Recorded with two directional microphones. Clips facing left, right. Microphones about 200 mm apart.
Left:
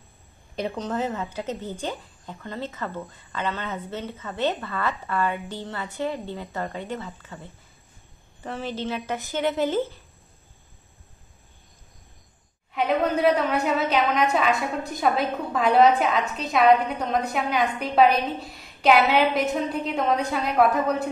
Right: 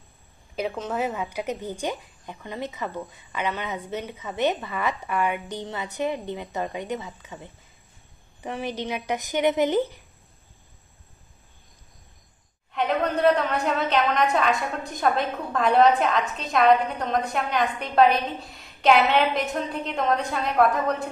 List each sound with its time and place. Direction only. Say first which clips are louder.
0.6 s speech: even; 5° right (ahead or behind)
12.7 s a woman's voice: left 2 dB; centre (ahead or behind)